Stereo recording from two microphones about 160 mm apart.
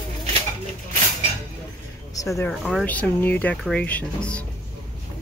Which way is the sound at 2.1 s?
20° left (ahead or behind).